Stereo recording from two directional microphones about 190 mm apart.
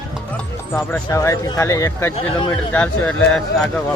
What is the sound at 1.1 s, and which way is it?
Speech, 15° left (ahead or behind).